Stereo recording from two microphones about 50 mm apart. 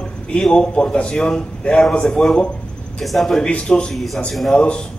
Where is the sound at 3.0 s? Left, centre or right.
Centre.